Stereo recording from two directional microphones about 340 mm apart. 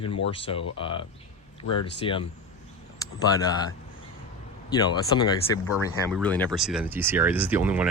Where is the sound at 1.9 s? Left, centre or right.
Centre.